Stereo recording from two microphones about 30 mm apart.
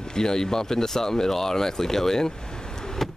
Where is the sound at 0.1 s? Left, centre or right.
Left.